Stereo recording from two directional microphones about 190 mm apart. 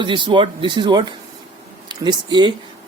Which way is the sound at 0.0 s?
25° right (ahead or behind).